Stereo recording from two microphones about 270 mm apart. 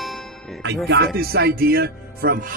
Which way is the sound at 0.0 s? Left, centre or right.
Centre.